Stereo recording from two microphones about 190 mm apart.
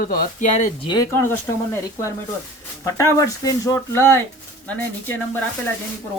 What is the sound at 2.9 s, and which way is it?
Speech, 15° left (ahead or behind).